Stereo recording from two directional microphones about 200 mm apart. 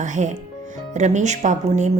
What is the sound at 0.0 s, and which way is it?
A woman's voice, 35° right (ahead or behind).